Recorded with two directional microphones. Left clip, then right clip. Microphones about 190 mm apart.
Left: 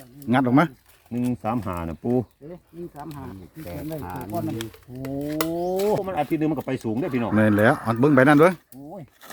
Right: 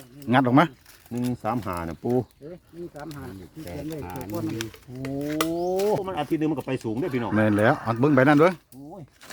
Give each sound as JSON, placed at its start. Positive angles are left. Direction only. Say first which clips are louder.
{"t": 0.3, "sound": "speech", "louder": "even", "side_deg": -5}
{"t": 1.1, "sound": "speech", "louder": "left 1 dB", "side_deg": 10}
{"t": 3.7, "sound": "speech", "louder": "left 2 dB", "side_deg": 0}
{"t": 6.1, "sound": "speech", "louder": "left 2 dB", "side_deg": 40}
{"t": 7.3, "sound": "speech", "louder": "left 2 dB", "side_deg": 5}